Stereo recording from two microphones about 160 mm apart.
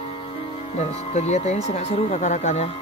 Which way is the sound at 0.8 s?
45° left (ahead or behind).